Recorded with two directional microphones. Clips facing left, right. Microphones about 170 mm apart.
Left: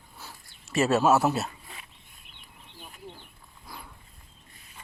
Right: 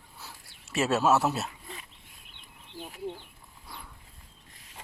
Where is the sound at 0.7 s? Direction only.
Centre (ahead or behind).